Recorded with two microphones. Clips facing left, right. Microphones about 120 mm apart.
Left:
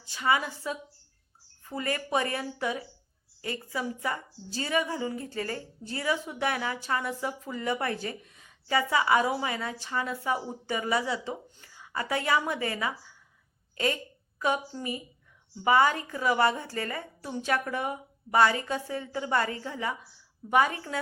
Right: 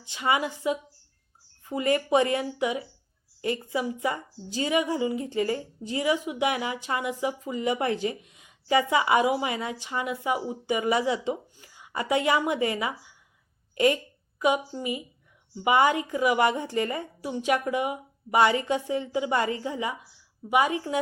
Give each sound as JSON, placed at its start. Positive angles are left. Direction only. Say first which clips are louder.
{"t": 0.0, "sound": "a woman's voice", "louder": "right 1 dB", "side_deg": -20}